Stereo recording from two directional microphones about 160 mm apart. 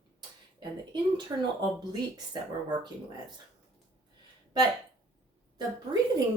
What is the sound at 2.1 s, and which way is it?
Speech, 25° right (ahead or behind).